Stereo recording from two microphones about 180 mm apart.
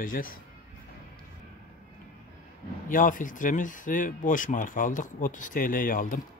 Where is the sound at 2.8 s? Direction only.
50° left (ahead or behind).